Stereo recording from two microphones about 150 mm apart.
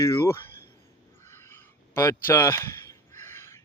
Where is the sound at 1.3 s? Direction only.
15° left (ahead or behind).